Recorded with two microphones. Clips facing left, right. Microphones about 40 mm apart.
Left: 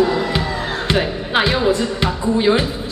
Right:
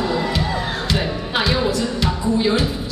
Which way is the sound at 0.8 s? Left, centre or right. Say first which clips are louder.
Left 3 dB; left.